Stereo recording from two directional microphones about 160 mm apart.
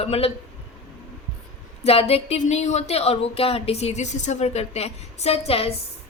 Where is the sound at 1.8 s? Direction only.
40° left (ahead or behind).